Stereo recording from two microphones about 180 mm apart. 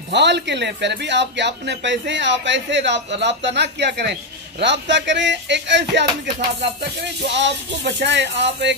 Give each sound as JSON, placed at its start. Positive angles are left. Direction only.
{"t": 0.1, "sound": "speech", "side_deg": -75}